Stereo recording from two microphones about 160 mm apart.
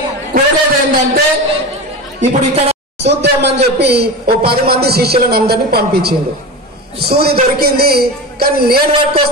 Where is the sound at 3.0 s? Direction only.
90° right.